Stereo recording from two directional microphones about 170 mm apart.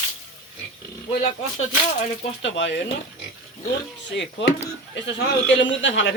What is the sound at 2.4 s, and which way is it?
Speech, 90° left.